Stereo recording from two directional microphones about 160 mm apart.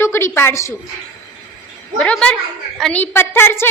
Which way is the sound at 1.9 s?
5° left (ahead or behind).